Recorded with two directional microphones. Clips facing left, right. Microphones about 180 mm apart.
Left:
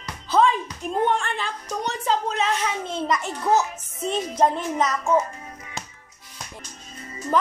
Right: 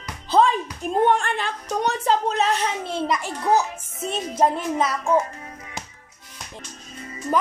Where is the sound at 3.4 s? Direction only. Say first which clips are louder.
Right 1 dB; 10° right (ahead or behind).